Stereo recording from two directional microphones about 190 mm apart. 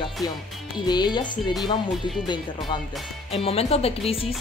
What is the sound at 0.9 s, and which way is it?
Speech, 20° left (ahead or behind).